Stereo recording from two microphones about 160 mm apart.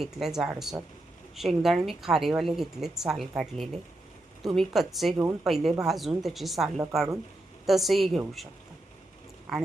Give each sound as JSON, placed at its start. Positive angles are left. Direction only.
{"t": 0.0, "sound": "speech", "side_deg": 0}
{"t": 5.1, "sound": "speech", "side_deg": -15}
{"t": 5.5, "sound": "speech", "side_deg": 0}
{"t": 9.5, "sound": "speech", "side_deg": 0}